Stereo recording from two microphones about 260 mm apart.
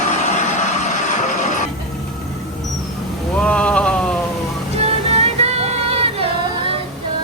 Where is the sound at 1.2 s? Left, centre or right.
Left.